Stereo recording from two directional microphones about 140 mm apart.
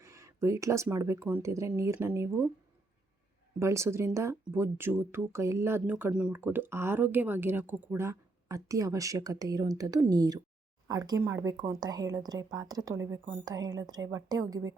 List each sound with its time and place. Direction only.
0.0 s speech: 20° right (ahead or behind)
3.6 s speech: 20° right (ahead or behind)